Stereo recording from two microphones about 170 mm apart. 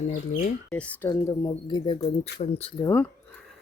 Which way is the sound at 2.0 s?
35° left (ahead or behind).